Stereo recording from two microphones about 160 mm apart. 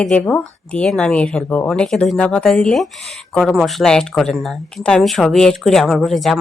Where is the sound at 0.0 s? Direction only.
5° left (ahead or behind).